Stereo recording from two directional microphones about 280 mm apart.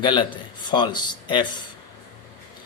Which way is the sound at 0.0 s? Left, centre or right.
Centre.